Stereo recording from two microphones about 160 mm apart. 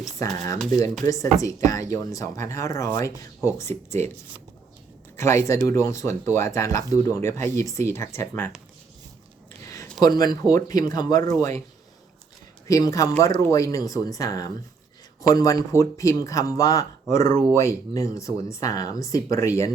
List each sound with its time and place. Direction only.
0.2 s speech: 20° left (ahead or behind)
5.1 s speech: 15° left (ahead or behind)
10.0 s speech: 25° left (ahead or behind)
12.6 s speech: 20° left (ahead or behind)